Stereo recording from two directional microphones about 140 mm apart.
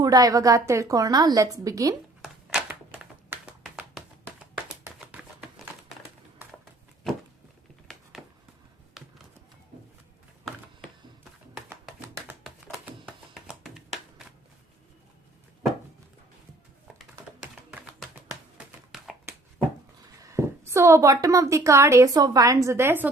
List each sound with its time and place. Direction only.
0.0 s a woman's voice: 25° right (ahead or behind)
2.2 s a sound: 5° right (ahead or behind)
3.6 s clapping: centre (ahead or behind)
4.9 s typewriter: 5° right (ahead or behind)
7.9 s a sound: 5° left (ahead or behind)
11.7 s music: 20° right (ahead or behind)
12.4 s music: 5° right (ahead or behind)
17.4 s typing: 5° right (ahead or behind)
18.9 s a sound: centre (ahead or behind)
20.2 s a woman's voice: 20° right (ahead or behind)